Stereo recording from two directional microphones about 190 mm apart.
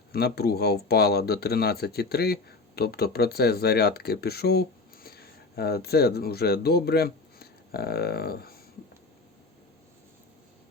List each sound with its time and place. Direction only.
0.1 s speech: 55° left (ahead or behind)